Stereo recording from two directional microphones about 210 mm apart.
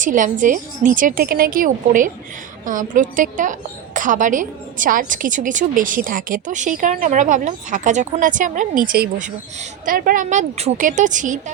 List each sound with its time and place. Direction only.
0.0 s a woman's voice: 40° right (ahead or behind)